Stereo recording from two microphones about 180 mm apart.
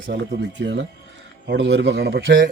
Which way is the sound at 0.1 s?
60° right (ahead or behind).